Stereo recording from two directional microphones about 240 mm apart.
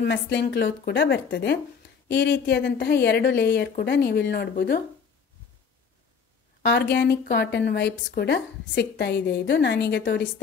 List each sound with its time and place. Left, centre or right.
0.0 s speech: left
6.6 s speech: left